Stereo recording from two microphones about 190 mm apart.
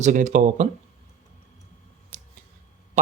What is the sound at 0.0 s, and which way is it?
Speech, 40° right (ahead or behind).